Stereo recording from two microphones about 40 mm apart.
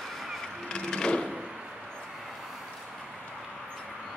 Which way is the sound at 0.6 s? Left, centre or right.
Left.